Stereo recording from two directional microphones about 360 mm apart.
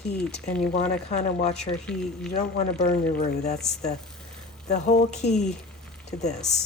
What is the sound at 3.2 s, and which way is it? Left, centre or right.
Speech, centre.